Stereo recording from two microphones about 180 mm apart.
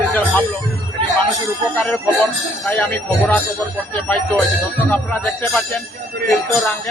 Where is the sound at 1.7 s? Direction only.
10° left (ahead or behind).